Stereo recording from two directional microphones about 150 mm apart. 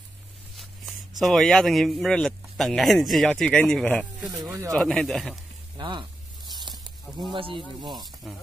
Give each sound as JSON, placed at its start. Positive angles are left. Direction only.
{"t": 1.2, "sound": "speech", "side_deg": 0}
{"t": 4.2, "sound": "speech", "side_deg": -25}
{"t": 4.7, "sound": "speech", "side_deg": 5}
{"t": 5.8, "sound": "snake", "side_deg": -30}
{"t": 6.7, "sound": "a sound", "side_deg": 0}
{"t": 7.3, "sound": "speech", "side_deg": -35}
{"t": 8.2, "sound": "speech", "side_deg": 0}